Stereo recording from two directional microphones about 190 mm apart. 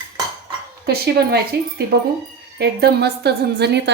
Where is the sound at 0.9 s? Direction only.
60° right (ahead or behind).